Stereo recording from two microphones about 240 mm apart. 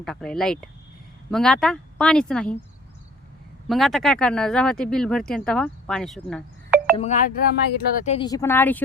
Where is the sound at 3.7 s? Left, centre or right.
Centre.